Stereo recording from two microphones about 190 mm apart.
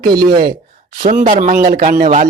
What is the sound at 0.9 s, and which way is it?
Speech, 40° right (ahead or behind).